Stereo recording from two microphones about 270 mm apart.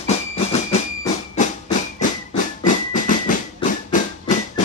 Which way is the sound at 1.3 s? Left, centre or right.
Left.